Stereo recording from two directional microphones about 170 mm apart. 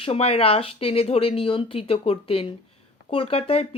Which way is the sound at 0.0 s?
35° left (ahead or behind).